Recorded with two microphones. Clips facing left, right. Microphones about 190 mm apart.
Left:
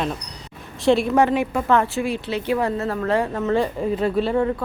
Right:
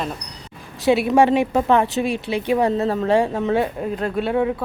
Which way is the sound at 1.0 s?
15° right (ahead or behind).